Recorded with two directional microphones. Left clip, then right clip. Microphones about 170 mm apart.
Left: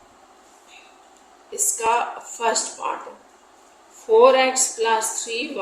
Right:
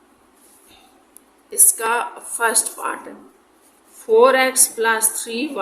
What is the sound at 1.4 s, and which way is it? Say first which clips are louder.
A woman's voice: right 1 dB; 45° right (ahead or behind).